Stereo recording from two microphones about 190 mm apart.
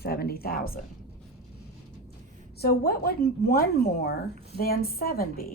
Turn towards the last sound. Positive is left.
turn(degrees=50)  # may be behind; listen again after turning